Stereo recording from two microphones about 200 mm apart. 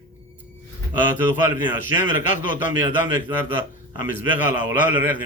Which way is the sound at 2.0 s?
40° left (ahead or behind).